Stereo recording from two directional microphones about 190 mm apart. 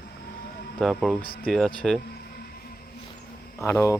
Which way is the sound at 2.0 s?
55° left (ahead or behind).